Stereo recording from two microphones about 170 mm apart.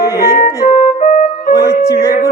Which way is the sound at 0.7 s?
45° left (ahead or behind).